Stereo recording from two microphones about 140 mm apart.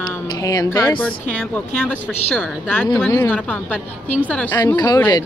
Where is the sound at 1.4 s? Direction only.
10° left (ahead or behind).